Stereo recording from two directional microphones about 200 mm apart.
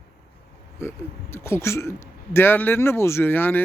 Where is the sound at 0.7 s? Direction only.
10° left (ahead or behind).